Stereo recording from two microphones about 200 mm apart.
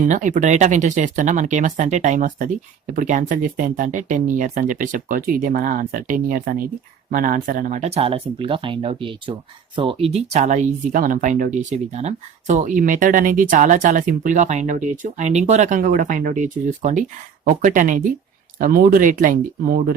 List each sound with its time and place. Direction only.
0.0 s speech: 40° right (ahead or behind)